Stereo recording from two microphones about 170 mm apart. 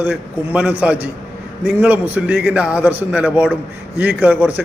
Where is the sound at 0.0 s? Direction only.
10° right (ahead or behind).